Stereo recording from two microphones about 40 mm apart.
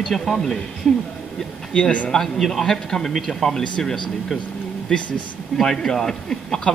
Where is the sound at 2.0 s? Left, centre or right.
Centre.